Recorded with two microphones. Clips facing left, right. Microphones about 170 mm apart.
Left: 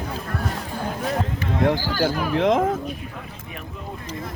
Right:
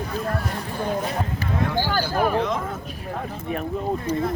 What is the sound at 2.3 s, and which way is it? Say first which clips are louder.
Speech: left 4 dB; 90° left.